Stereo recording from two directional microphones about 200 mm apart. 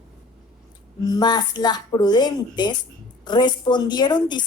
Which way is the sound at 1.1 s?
20° left (ahead or behind).